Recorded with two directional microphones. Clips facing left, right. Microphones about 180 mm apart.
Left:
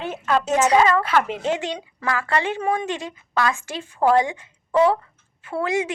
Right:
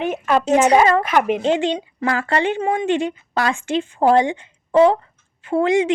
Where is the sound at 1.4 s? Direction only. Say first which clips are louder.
Right 6 dB; 30° right (ahead or behind).